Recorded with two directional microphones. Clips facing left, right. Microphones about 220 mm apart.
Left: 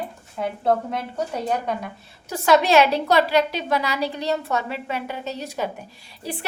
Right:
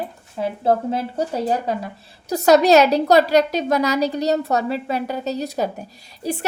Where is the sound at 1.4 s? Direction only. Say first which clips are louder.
Right 3 dB; 30° right (ahead or behind).